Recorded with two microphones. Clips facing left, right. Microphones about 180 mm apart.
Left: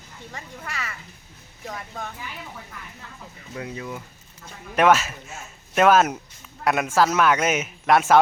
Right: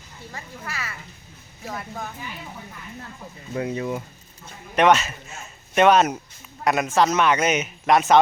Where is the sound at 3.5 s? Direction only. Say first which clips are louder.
Right 7 dB; 30° right (ahead or behind).